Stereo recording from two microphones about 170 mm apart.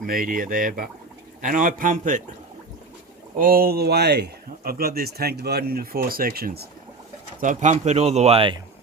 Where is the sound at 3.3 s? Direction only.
60° right (ahead or behind).